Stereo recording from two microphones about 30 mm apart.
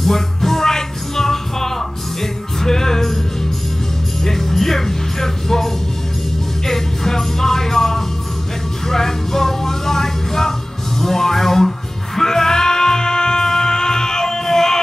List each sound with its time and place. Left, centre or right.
0.0 s music: centre
4.2 s music: centre